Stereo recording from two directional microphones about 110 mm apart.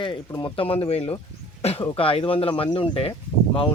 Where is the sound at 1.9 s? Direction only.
55° left (ahead or behind).